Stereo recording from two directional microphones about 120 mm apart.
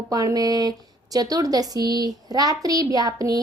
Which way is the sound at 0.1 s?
30° right (ahead or behind).